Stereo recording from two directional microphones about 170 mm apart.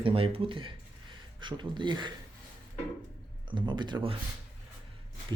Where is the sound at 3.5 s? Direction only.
30° right (ahead or behind).